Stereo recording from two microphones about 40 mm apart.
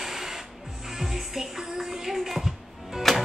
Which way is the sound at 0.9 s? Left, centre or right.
Centre.